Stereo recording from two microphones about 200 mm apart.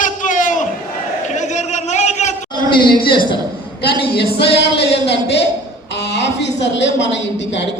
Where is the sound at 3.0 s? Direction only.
50° left (ahead or behind).